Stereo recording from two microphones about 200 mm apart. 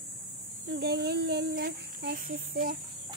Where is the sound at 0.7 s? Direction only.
55° right (ahead or behind).